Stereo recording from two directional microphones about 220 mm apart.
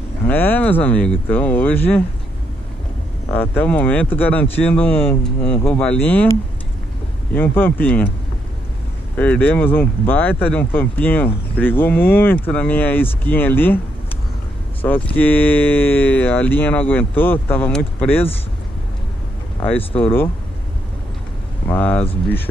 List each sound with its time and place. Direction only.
0.3 s speech: 10° left (ahead or behind)
3.3 s speech: 5° left (ahead or behind)
7.3 s speech: 10° left (ahead or behind)
9.1 s speech: 5° left (ahead or behind)
14.8 s speech: 5° left (ahead or behind)
20.0 s speech: 10° left (ahead or behind)
21.6 s speech: 5° left (ahead or behind)